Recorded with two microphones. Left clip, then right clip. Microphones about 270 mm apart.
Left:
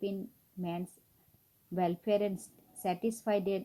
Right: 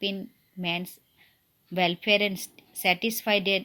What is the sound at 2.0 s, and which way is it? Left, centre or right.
Speech, right.